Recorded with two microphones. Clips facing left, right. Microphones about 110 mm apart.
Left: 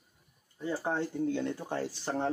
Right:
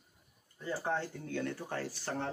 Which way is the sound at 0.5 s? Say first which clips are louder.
Left 3 dB; 20° left (ahead or behind).